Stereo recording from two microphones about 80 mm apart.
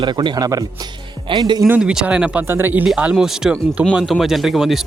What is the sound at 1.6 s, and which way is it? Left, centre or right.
Speech, centre.